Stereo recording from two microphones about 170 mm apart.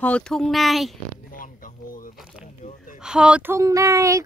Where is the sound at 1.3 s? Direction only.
55° left (ahead or behind).